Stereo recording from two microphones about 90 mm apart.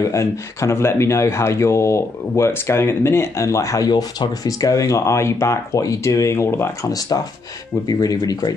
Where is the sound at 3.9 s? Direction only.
50° left (ahead or behind); by 6.7 s 30° left (ahead or behind).